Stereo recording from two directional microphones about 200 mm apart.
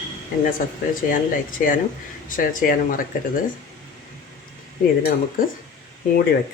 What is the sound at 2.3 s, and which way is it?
Speech, 45° left (ahead or behind).